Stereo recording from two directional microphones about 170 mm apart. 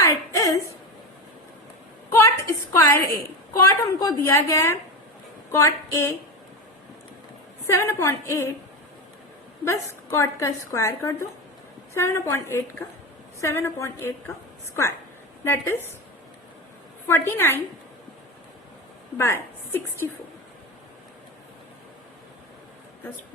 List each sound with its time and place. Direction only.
0.0 s a sound: 20° left (ahead or behind)
2.0 s a sound: 15° left (ahead or behind)
2.7 s a woman's voice: 15° left (ahead or behind)
7.7 s a woman's voice: 15° left (ahead or behind)
9.6 s a woman's voice: 15° left (ahead or behind)
15.4 s a woman's voice: 15° left (ahead or behind)
17.1 s a woman's voice: 15° left (ahead or behind)
19.1 s a woman's voice: 15° left (ahead or behind)